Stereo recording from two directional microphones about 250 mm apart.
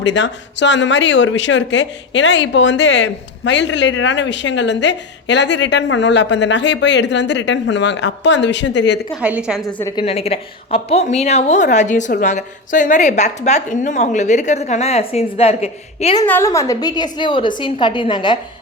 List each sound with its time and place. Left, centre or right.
0.0 s speech: left
9.2 s a woman's voice: centre
9.8 s a woman's voice: centre
16.2 s a woman's voice: centre